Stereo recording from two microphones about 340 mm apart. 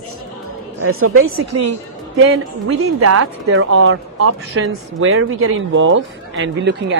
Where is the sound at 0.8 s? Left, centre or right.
Right.